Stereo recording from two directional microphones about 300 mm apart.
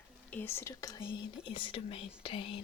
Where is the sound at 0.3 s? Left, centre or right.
Centre.